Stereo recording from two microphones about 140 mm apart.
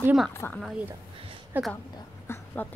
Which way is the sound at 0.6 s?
10° right (ahead or behind).